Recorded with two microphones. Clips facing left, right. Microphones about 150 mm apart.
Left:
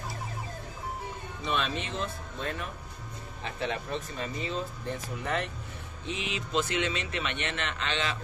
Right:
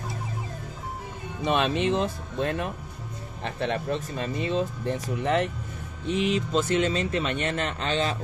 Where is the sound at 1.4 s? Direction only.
60° right (ahead or behind).